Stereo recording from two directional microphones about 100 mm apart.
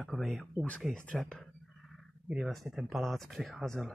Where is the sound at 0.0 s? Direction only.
Centre (ahead or behind).